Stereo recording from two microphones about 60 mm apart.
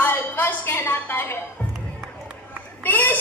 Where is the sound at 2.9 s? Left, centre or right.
Left.